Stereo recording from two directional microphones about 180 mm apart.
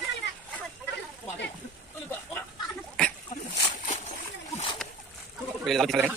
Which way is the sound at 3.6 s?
35° left (ahead or behind).